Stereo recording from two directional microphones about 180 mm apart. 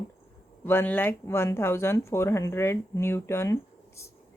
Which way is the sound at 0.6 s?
10° left (ahead or behind).